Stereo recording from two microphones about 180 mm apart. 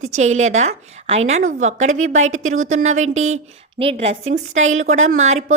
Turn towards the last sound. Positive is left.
turn(degrees=-40)  # may be behind; listen again after turning